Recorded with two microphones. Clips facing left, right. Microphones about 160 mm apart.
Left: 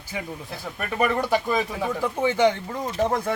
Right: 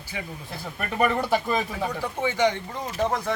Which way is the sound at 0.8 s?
5° left (ahead or behind).